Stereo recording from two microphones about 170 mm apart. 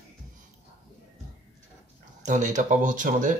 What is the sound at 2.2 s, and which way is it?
Speech, 45° right (ahead or behind).